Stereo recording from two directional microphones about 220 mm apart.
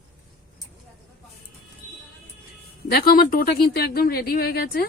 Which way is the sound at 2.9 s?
45° left (ahead or behind).